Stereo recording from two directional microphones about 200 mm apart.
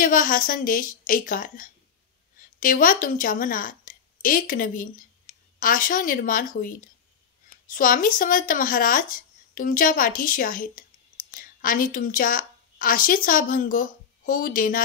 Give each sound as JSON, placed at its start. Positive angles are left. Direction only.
{"t": 0.0, "sound": "a woman's voice", "side_deg": 45}